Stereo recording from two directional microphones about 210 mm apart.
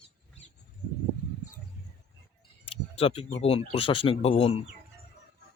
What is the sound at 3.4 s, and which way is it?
Speech, 25° left (ahead or behind).